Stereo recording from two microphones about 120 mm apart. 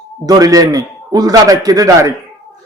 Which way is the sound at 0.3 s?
30° right (ahead or behind).